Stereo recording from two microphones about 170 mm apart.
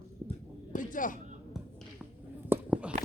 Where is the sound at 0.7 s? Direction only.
50° left (ahead or behind).